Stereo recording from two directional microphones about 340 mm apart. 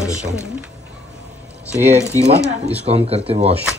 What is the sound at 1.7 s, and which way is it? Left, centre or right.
Speech, centre.